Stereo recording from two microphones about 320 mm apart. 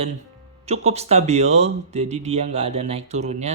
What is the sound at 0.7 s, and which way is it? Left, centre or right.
Speech, centre.